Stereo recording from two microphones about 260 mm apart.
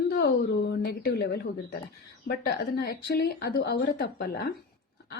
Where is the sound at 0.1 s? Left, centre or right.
Left.